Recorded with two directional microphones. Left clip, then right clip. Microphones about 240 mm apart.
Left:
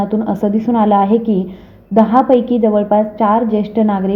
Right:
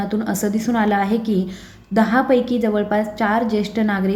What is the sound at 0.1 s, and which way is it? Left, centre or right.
A woman's voice, centre.